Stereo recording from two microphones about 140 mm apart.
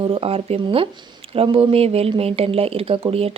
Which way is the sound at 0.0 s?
40° right (ahead or behind).